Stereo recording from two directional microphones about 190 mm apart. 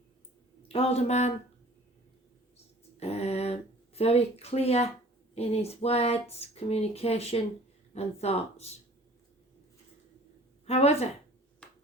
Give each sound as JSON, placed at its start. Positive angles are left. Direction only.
{"t": 0.7, "sound": "speech", "side_deg": 30}
{"t": 3.0, "sound": "speech", "side_deg": 35}
{"t": 10.7, "sound": "speech", "side_deg": 35}
{"t": 11.6, "sound": "ping", "side_deg": 5}